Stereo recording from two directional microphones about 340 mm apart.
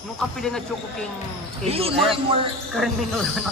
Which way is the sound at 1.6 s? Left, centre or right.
Centre.